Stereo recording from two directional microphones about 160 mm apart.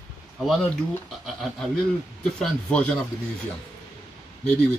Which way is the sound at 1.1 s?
Centre (ahead or behind).